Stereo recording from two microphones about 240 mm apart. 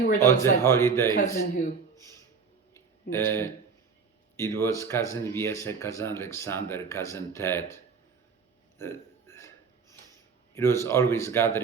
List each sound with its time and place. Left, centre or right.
0.0 s a man's voice: left
0.3 s speech: centre
2.7 s a sound: centre
4.4 s speech: centre
8.8 s burping: centre
10.5 s speech: centre